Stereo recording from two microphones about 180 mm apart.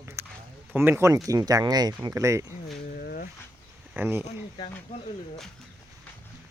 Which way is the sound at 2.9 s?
55° left (ahead or behind).